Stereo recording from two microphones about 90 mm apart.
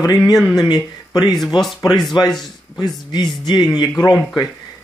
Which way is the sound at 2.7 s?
55° left (ahead or behind).